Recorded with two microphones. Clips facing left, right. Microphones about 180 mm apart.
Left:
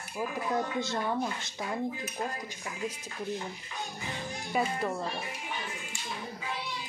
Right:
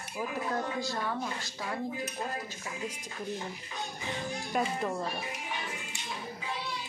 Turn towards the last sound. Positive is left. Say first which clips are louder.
# left 1 dB
turn(degrees=5)  # may be behind; listen again after turning